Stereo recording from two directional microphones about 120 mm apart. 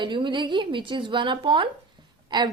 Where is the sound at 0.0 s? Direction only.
40° right (ahead or behind).